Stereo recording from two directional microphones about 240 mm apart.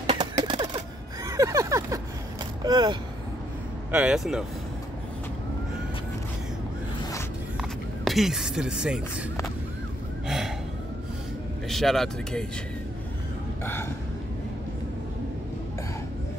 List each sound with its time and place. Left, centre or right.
0.1 s typewriter: right
2.6 s speech: centre
3.9 s speech: centre
8.0 s speech: centre
10.2 s a sound: centre
11.7 s speech: centre